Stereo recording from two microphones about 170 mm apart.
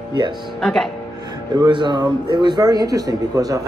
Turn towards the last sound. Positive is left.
turn(degrees=-20)  # may be behind; listen again after turning